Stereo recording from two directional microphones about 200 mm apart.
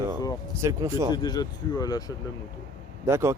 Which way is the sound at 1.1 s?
20° left (ahead or behind).